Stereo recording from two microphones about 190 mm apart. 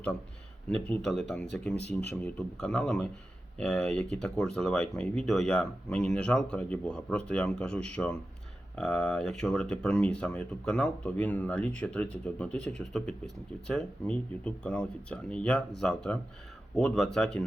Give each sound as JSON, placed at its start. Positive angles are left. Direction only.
{"t": 0.7, "sound": "speech", "side_deg": 5}